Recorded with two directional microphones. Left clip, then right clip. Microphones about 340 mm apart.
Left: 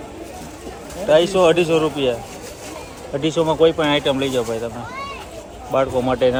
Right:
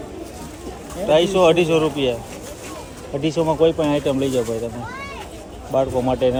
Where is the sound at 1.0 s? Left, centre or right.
Centre.